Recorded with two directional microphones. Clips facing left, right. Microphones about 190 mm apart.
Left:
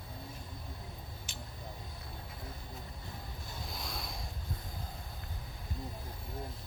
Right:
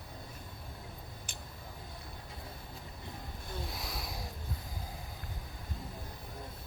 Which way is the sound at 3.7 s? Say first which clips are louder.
Right 1 dB; 5° right (ahead or behind).